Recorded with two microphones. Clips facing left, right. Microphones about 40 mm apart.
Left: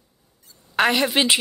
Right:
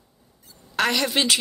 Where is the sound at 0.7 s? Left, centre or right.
Left.